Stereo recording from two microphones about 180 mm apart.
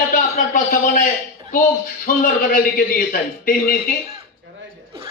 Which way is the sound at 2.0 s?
50° left (ahead or behind).